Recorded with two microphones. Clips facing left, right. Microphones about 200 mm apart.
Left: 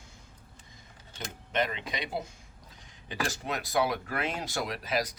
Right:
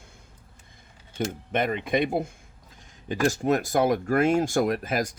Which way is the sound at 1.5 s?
55° right (ahead or behind).